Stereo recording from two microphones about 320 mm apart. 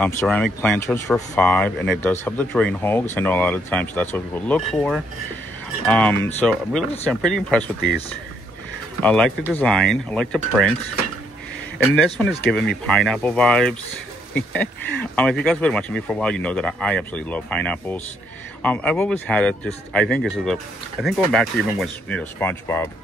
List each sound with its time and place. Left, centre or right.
0.0 s speech: centre
9.0 s speech: centre
12.8 s speech: centre